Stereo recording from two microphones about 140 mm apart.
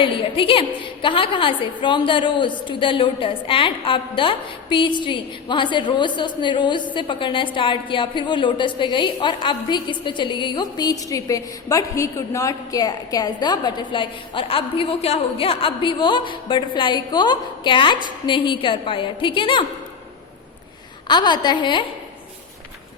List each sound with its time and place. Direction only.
0.0 s a woman's voice: 40° left (ahead or behind)
21.1 s a woman's voice: 30° left (ahead or behind)